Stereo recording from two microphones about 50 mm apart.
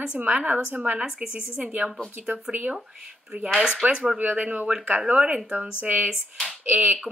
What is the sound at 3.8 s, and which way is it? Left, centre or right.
Speech, right.